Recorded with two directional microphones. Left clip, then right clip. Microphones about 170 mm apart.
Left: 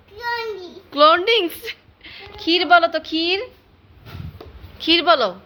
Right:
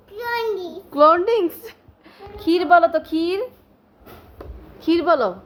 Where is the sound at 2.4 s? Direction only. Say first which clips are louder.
Even; 20° right (ahead or behind).